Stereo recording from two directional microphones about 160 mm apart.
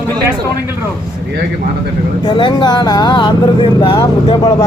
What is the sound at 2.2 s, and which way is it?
Speech, 30° left (ahead or behind).